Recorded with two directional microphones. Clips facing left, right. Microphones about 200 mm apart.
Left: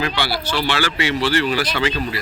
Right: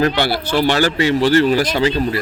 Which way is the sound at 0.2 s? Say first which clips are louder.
Right 6 dB; 50° right (ahead or behind).